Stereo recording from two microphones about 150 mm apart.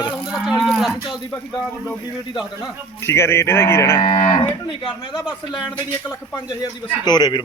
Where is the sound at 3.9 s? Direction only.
35° left (ahead or behind).